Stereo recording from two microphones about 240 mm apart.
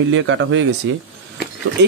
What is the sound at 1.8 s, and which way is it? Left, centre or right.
Speech, right.